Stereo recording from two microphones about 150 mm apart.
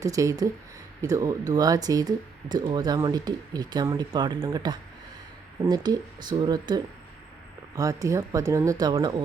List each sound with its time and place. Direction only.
0.0 s speech: 20° right (ahead or behind)